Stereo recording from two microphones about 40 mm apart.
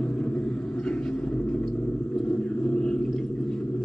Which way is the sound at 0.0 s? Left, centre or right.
Left.